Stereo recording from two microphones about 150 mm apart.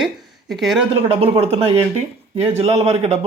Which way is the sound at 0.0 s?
Centre (ahead or behind).